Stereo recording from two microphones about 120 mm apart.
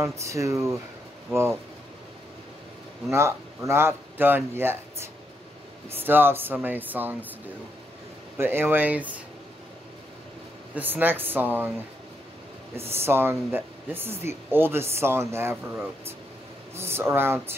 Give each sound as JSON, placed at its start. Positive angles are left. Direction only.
{"t": 0.0, "sound": "speech", "side_deg": -25}
{"t": 3.1, "sound": "speech", "side_deg": -25}
{"t": 8.4, "sound": "speech", "side_deg": -20}
{"t": 10.7, "sound": "speech", "side_deg": -15}
{"t": 12.9, "sound": "speech", "side_deg": -20}
{"t": 16.7, "sound": "speech", "side_deg": -20}